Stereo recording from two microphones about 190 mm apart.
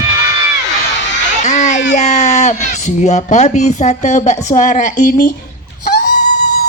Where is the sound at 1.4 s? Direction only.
40° left (ahead or behind).